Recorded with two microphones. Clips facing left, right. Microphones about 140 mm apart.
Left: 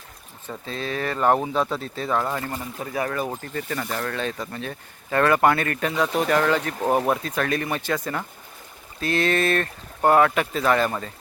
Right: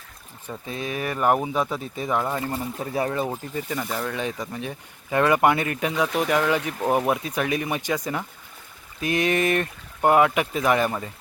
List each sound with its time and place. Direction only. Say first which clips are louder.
0.4 s speech: left 1 dB; 15° right (ahead or behind)
2.5 s speech: right 2 dB; 30° right (ahead or behind)
3.4 s speech: even; 10° right (ahead or behind)